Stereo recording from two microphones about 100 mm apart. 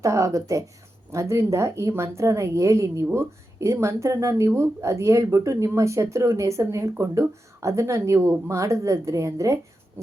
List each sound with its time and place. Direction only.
0.0 s a woman's voice: 30° right (ahead or behind)